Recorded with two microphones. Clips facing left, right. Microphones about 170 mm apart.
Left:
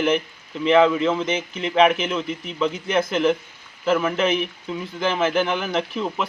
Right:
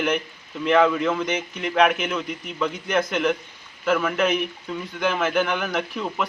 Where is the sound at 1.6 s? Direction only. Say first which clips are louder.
Left 2 dB; centre (ahead or behind).